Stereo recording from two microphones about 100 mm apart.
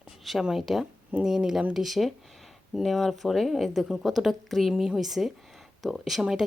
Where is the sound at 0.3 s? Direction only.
Centre (ahead or behind).